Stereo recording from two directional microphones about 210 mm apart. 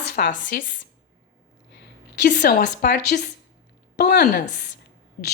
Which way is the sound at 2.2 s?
40° left (ahead or behind).